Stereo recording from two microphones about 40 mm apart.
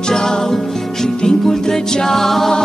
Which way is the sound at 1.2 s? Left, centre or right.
Centre.